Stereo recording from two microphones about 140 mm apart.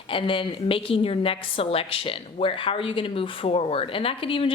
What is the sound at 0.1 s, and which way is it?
A woman's voice, 40° left (ahead or behind).